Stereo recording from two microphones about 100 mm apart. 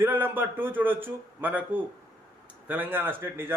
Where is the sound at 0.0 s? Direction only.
20° right (ahead or behind).